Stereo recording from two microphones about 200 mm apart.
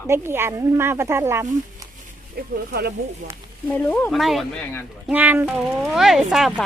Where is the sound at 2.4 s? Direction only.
50° right (ahead or behind).